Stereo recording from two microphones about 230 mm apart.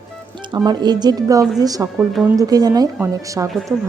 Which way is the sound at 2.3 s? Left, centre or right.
Centre.